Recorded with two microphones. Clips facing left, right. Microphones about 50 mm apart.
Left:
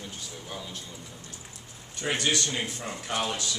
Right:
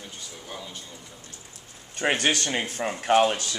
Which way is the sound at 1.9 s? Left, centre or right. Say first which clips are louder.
Right 4 dB; right.